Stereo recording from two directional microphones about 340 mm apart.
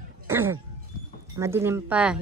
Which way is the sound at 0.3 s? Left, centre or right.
Centre.